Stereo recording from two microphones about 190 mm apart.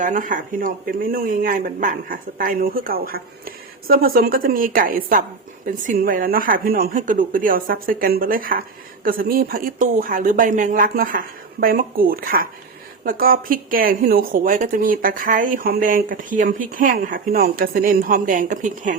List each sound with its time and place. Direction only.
0.0 s a woman's voice: 45° right (ahead or behind)